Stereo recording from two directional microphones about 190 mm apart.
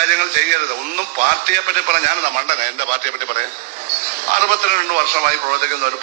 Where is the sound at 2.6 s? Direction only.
35° right (ahead or behind).